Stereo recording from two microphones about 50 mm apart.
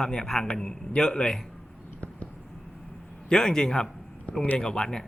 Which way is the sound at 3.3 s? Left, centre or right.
Centre.